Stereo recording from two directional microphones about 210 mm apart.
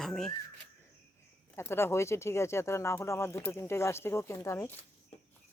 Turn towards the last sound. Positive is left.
turn(degrees=15)  # may be behind; listen again after turning